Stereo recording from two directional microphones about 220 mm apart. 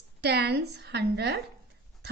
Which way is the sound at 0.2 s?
50° right (ahead or behind).